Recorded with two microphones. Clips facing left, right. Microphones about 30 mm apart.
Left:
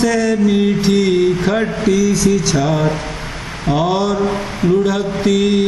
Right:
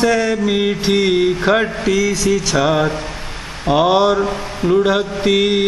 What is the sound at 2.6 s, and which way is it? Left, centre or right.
Speech, right.